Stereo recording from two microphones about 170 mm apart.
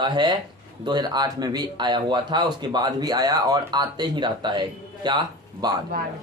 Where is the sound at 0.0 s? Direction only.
25° right (ahead or behind).